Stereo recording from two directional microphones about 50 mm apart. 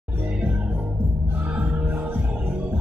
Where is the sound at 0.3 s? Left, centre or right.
Right.